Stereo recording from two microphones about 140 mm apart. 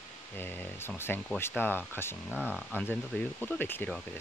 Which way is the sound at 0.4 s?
15° left (ahead or behind).